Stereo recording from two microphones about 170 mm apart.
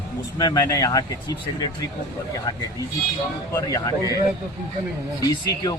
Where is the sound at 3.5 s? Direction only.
20° left (ahead or behind).